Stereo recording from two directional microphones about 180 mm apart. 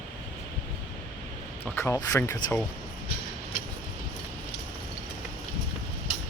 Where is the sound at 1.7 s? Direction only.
15° left (ahead or behind).